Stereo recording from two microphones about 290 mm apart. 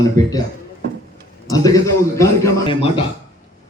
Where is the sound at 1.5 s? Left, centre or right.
Centre.